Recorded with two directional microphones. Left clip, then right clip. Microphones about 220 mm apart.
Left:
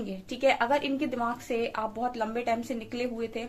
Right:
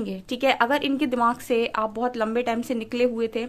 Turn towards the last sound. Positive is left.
turn(degrees=-50)  # may be behind; listen again after turning